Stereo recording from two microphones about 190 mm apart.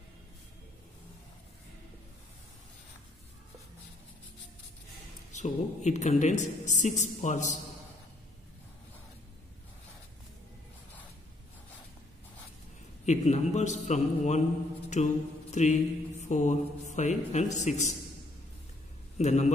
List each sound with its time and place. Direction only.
5.3 s mantra: 40° left (ahead or behind)
13.0 s mantra: 40° left (ahead or behind)
19.1 s a man's voice: 35° left (ahead or behind)